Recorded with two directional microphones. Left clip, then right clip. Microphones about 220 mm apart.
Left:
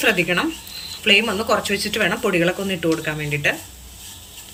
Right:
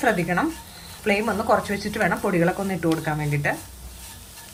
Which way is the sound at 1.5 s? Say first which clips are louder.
Left 2 dB; 25° right (ahead or behind).